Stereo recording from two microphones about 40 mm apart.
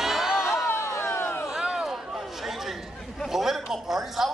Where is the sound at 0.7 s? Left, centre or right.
Left.